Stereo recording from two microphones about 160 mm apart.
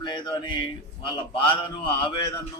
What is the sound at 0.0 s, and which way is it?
A man's voice, 30° left (ahead or behind).